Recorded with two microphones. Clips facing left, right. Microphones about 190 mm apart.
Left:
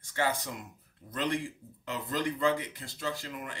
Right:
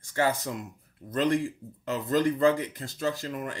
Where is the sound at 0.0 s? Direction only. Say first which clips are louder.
Right 5 dB; 45° right (ahead or behind).